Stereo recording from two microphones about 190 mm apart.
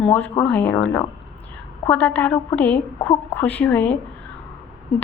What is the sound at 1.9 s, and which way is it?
A woman's voice, 10° left (ahead or behind).